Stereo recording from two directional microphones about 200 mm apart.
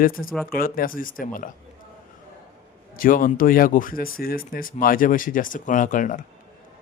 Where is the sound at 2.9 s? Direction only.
45° left (ahead or behind).